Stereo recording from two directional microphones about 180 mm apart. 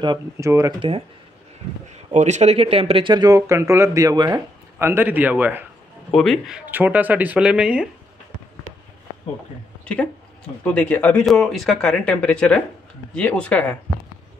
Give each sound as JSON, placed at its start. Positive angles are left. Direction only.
{"t": 0.0, "sound": "speech", "side_deg": -20}
{"t": 0.7, "sound": "speech", "side_deg": -30}
{"t": 2.1, "sound": "speech", "side_deg": -40}
{"t": 6.1, "sound": "speech", "side_deg": 0}
{"t": 10.6, "sound": "speech", "side_deg": 5}